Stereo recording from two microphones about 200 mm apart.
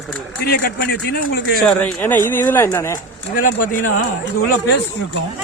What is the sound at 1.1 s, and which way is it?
Speech, 50° left (ahead or behind).